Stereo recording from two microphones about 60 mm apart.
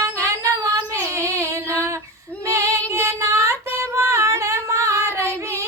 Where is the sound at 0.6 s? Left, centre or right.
Right.